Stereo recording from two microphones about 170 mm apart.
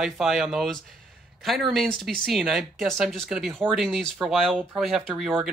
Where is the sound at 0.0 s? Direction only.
Centre (ahead or behind).